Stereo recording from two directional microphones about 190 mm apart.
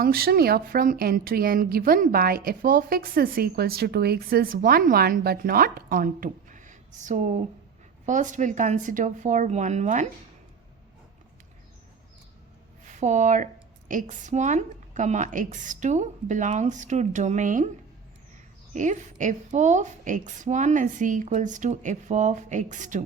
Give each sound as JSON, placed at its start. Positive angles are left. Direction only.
{"t": 0.0, "sound": "a woman's voice", "side_deg": -55}
{"t": 12.9, "sound": "a woman's voice", "side_deg": -40}
{"t": 18.7, "sound": "a woman's voice", "side_deg": -40}